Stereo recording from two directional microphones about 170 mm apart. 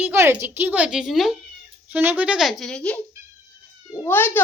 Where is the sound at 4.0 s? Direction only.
10° left (ahead or behind).